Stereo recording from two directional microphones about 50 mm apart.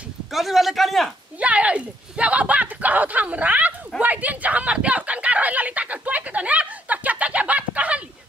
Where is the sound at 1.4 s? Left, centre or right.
Right.